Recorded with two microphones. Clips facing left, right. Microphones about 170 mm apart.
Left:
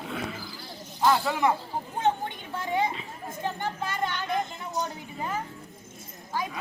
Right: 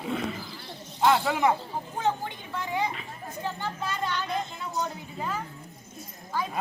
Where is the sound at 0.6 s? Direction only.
25° right (ahead or behind).